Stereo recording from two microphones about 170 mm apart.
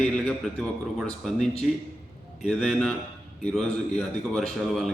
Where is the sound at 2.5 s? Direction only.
Centre (ahead or behind).